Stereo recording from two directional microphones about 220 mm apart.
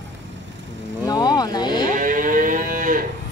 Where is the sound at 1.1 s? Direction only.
15° left (ahead or behind).